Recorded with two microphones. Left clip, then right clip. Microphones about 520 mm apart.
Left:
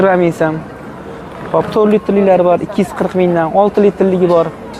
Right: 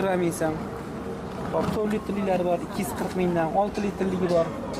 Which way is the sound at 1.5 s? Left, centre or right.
Left.